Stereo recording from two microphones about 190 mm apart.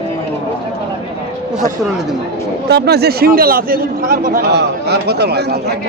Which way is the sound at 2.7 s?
60° right (ahead or behind).